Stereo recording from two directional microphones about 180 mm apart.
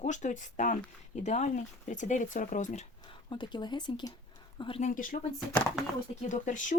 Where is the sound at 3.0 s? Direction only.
25° left (ahead or behind).